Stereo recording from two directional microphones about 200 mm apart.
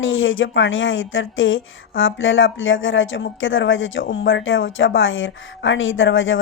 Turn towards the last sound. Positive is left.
turn(degrees=75)  # may be behind; listen again after turning